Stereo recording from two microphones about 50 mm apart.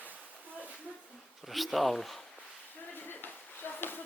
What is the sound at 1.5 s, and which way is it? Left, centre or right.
Speech, centre.